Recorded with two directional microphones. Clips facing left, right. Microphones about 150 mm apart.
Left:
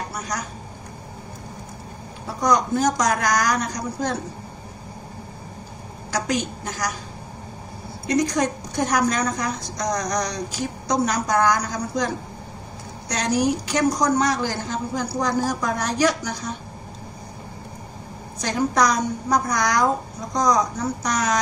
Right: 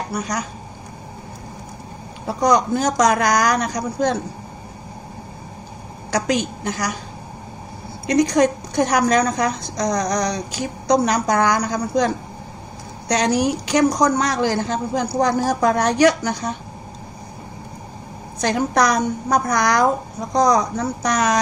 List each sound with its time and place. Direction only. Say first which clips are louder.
2.4 s a woman's voice: right 2 dB; 70° right (ahead or behind)
6.1 s a woman's voice: right 4 dB; 75° right (ahead or behind)
8.1 s a woman's voice: right 5 dB; 75° right (ahead or behind)
13.1 s a woman's voice: right 3 dB; 75° right (ahead or behind)
18.4 s a woman's voice: right 3 dB; 65° right (ahead or behind)